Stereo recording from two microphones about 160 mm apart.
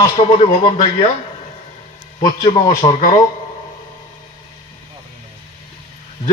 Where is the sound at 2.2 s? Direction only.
45° left (ahead or behind).